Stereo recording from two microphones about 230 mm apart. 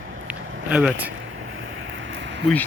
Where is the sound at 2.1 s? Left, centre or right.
Right.